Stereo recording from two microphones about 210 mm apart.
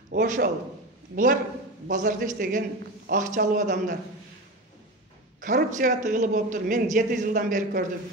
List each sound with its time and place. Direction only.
0.1 s a man's voice: 40° right (ahead or behind)
5.4 s a man's voice: 40° right (ahead or behind)